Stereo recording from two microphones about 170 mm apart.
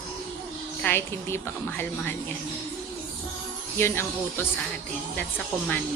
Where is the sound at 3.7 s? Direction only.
15° left (ahead or behind).